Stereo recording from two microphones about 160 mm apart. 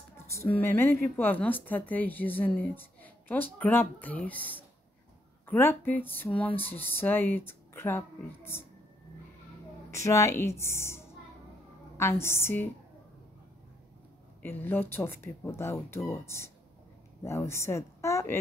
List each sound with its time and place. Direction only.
0.5 s a woman's voice: 15° left (ahead or behind)
9.9 s a woman's voice: 20° left (ahead or behind)
14.4 s a woman's voice: 15° left (ahead or behind)